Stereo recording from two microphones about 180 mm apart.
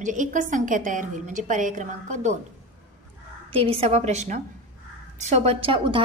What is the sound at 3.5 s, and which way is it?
A woman's voice, 30° right (ahead or behind).